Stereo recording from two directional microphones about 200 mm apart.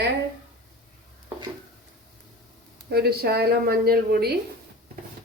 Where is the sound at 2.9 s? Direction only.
50° right (ahead or behind).